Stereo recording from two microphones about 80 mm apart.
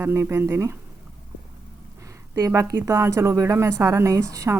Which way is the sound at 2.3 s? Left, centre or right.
Right.